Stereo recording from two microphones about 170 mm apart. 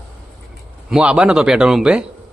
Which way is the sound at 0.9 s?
5° right (ahead or behind).